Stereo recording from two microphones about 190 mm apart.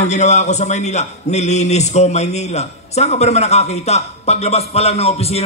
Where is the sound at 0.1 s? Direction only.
35° left (ahead or behind).